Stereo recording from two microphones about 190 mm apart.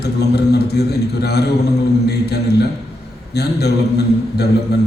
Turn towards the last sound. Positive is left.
turn(degrees=60)  # may be behind; listen again after turning